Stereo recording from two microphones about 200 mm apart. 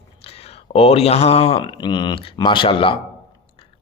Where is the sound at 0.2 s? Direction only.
30° left (ahead or behind).